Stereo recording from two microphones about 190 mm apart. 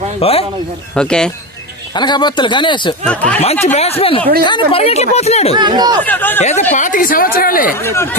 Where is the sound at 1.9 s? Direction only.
25° left (ahead or behind).